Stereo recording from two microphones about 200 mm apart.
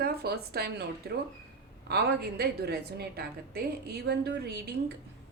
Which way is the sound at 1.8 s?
55° right (ahead or behind).